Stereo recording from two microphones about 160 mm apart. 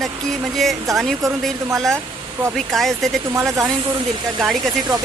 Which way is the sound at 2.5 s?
Centre (ahead or behind).